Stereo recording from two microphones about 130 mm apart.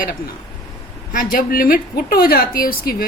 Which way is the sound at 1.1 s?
90° left.